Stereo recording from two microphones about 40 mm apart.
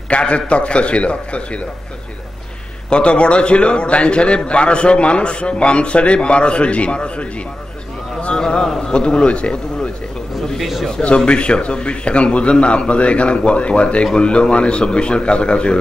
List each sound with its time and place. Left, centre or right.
0.1 s a man's voice: left
2.9 s a man's voice: left
8.4 s a man's voice: centre
10.3 s a sound: centre
10.9 s a man's voice: left